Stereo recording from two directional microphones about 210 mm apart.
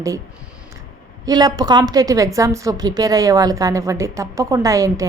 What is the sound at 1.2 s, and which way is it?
A woman's voice, 20° right (ahead or behind).